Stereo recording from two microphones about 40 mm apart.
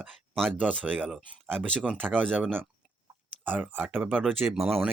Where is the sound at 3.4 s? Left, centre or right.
Right.